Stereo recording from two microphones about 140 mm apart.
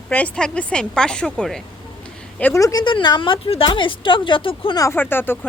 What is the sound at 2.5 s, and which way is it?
Speech, 25° left (ahead or behind).